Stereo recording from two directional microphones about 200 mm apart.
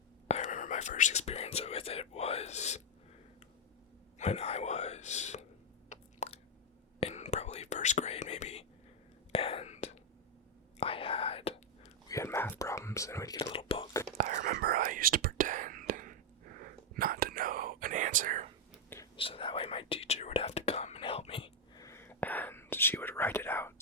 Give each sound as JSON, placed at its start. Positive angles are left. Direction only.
{"t": 0.3, "sound": "speech", "side_deg": 35}
{"t": 4.2, "sound": "speech", "side_deg": 35}
{"t": 5.9, "sound": "chewing", "side_deg": 35}
{"t": 7.0, "sound": "whispering", "side_deg": 35}
{"t": 12.0, "sound": "whispering", "side_deg": 15}
{"t": 14.2, "sound": "whispering", "side_deg": -40}
{"t": 19.1, "sound": "whispering", "side_deg": 25}
{"t": 21.8, "sound": "whispering", "side_deg": 10}